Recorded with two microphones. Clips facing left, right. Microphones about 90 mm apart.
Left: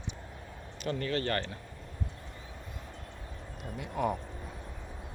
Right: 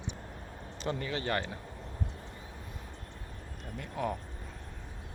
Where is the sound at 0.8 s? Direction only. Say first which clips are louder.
Left 2 dB; 20° right (ahead or behind).